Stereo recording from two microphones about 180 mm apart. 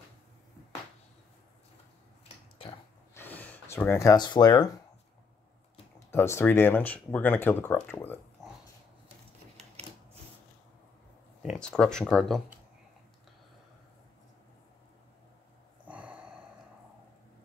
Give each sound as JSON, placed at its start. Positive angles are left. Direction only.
{"t": 3.2, "sound": "speech", "side_deg": 10}
{"t": 5.9, "sound": "speech", "side_deg": 15}
{"t": 11.6, "sound": "speech", "side_deg": 5}
{"t": 15.9, "sound": "a sound", "side_deg": -5}